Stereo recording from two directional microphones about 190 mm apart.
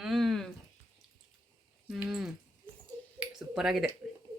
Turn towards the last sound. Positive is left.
turn(degrees=0)  # may be behind; listen again after turning